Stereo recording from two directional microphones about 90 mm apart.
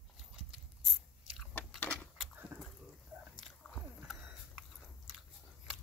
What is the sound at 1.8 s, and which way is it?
Keys jangling, 20° left (ahead or behind).